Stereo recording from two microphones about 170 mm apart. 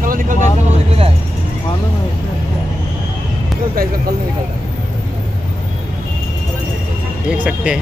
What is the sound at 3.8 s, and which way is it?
Speech, 60° right (ahead or behind).